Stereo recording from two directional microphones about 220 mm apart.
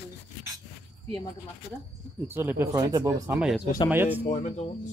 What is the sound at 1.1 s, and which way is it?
Speech, 20° left (ahead or behind).